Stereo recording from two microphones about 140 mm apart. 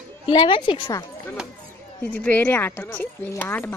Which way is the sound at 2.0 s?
10° left (ahead or behind).